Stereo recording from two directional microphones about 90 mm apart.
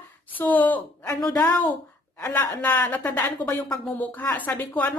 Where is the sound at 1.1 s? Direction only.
40° left (ahead or behind).